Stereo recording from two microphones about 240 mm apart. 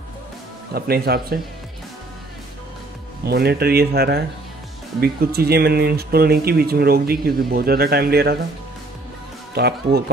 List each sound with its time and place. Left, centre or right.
0.7 s speech: right
3.3 s speech: right
9.5 s speech: right